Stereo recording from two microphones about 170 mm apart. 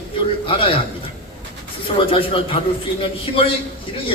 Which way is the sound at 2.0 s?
30° left (ahead or behind).